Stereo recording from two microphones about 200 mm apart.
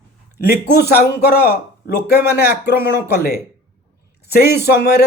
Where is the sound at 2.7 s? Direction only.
10° right (ahead or behind).